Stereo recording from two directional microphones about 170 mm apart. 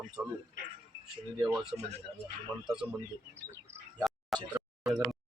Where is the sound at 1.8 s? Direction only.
40° right (ahead or behind).